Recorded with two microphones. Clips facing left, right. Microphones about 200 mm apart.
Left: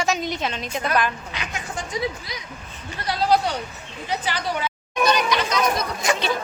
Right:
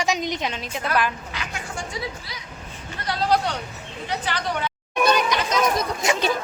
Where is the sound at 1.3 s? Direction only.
20° left (ahead or behind).